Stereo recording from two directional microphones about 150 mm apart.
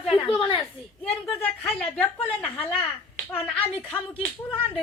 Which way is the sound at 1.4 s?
10° left (ahead or behind).